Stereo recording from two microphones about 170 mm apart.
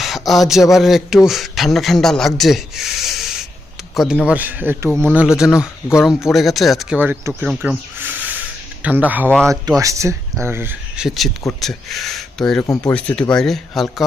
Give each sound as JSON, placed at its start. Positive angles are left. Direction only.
{"t": 0.0, "sound": "a sound", "side_deg": 0}
{"t": 0.7, "sound": "a man's voice", "side_deg": 0}
{"t": 7.0, "sound": "speech", "side_deg": -15}
{"t": 7.4, "sound": "a man's voice", "side_deg": 0}
{"t": 7.9, "sound": "a sound", "side_deg": -10}
{"t": 8.8, "sound": "a man's voice", "side_deg": -10}
{"t": 12.6, "sound": "speech", "side_deg": 20}
{"t": 12.9, "sound": "a man's voice", "side_deg": 5}